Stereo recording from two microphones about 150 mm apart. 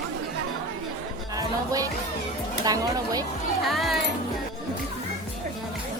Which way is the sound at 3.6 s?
Centre (ahead or behind).